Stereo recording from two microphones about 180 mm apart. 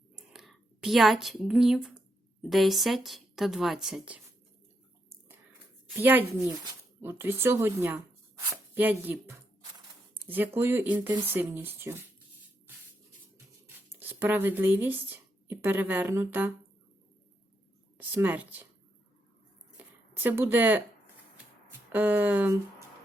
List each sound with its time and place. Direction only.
0.2 s whispering: 5° right (ahead or behind)
2.5 s a woman's voice: centre (ahead or behind)
6.0 s speech: 10° right (ahead or behind)
10.2 s speech: 10° right (ahead or behind)
13.9 s speech: 10° right (ahead or behind)
17.9 s speech: 10° right (ahead or behind)
20.2 s speech: 10° right (ahead or behind)